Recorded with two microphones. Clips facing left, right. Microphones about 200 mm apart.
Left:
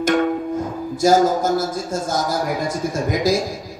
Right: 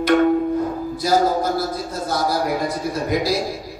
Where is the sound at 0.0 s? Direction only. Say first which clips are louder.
Right 3 dB; 45° left (ahead or behind).